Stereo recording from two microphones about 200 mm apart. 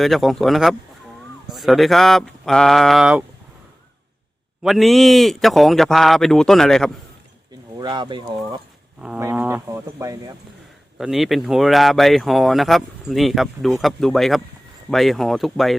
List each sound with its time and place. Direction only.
0.0 s speech: centre (ahead or behind)
4.6 s speech: centre (ahead or behind)
7.8 s speech: 20° right (ahead or behind)
9.0 s speech: 10° right (ahead or behind)
10.9 s speech: centre (ahead or behind)